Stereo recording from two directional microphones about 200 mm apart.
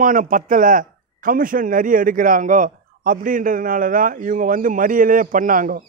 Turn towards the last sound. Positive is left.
turn(degrees=-45)  # may be behind; listen again after turning